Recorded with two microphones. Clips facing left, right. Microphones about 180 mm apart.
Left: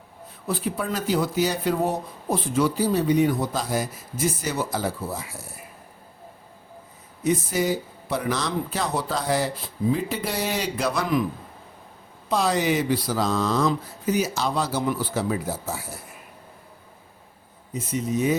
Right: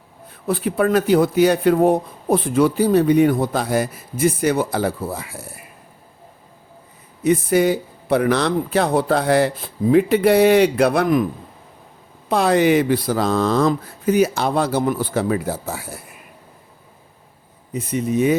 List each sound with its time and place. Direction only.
0.4 s speech: 60° right (ahead or behind)
7.3 s speech: 60° right (ahead or behind)
12.3 s speech: 60° right (ahead or behind)
17.7 s speech: 60° right (ahead or behind)